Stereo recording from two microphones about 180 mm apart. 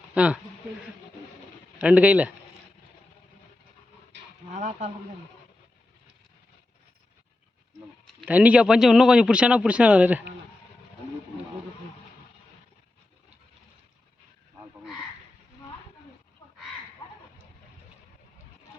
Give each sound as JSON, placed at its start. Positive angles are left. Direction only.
{"t": 0.1, "sound": "speech", "side_deg": -5}
{"t": 1.8, "sound": "a man's voice", "side_deg": -5}
{"t": 4.5, "sound": "a sound", "side_deg": -40}
{"t": 8.3, "sound": "a man's voice", "side_deg": -10}